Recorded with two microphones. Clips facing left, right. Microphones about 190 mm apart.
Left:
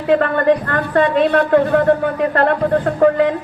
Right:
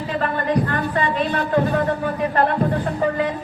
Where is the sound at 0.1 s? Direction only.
60° left (ahead or behind).